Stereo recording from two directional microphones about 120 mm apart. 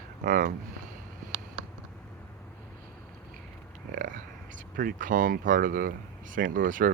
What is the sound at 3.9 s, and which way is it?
Speech, 90° right.